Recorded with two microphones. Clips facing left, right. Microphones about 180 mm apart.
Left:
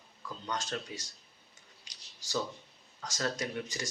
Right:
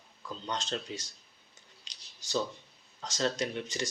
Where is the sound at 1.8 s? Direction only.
20° right (ahead or behind).